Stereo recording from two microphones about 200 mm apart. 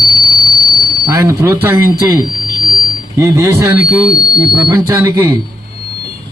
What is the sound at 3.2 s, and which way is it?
Speech, 15° right (ahead or behind).